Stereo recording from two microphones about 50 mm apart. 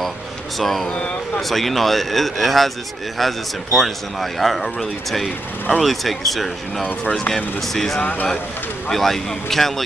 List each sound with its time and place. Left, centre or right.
0.6 s a man's voice: centre
0.8 s speech: centre
1.5 s a man's voice: centre
7.1 s speech: centre
7.6 s a man's voice: centre
8.0 s speech: left
8.8 s a man's voice: centre